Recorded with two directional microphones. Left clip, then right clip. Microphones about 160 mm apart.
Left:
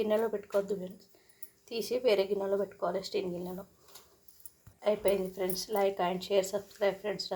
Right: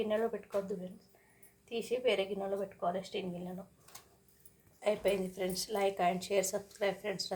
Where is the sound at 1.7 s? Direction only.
40° left (ahead or behind).